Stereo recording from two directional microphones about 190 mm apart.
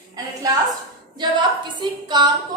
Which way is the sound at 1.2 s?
25° right (ahead or behind).